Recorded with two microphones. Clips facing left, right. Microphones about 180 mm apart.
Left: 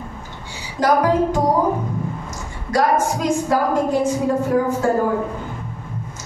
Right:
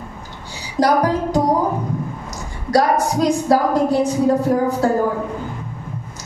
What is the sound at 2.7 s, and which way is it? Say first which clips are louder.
A woman's voice: right 2 dB; 35° right (ahead or behind).